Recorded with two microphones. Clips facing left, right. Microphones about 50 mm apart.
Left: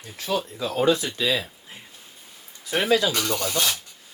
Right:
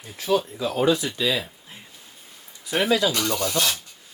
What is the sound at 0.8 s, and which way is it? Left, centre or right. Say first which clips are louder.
Speech: even; left.